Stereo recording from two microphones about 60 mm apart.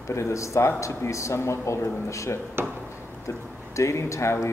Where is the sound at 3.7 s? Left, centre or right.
Left.